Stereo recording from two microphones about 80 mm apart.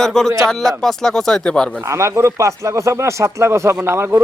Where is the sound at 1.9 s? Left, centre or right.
Right.